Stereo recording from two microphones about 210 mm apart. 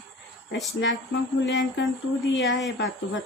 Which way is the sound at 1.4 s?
55° left (ahead or behind).